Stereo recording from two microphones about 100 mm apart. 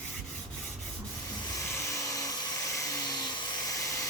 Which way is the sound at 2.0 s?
35° left (ahead or behind).